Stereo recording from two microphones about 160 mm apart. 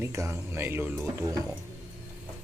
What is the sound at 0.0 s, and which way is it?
Speech, 20° right (ahead or behind).